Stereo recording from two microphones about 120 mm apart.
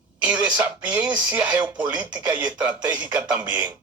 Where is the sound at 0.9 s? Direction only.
15° right (ahead or behind).